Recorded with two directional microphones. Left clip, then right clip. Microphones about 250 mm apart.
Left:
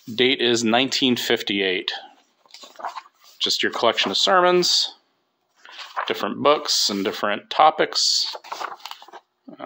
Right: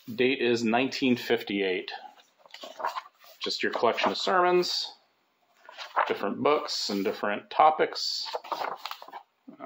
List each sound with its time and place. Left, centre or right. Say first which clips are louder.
0.1 s speech: left 6 dB; left
2.4 s dog: even; centre
3.3 s speech: left 7 dB; left
5.6 s a sound: left 6 dB; left
6.0 s speech: left 11 dB; left